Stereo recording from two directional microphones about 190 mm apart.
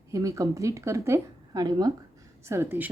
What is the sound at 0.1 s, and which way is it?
A woman's voice, 15° right (ahead or behind).